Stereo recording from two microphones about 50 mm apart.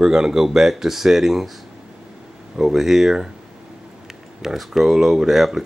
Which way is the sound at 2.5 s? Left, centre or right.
Centre.